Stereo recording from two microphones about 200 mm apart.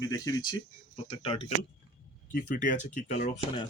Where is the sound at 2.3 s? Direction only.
40° left (ahead or behind).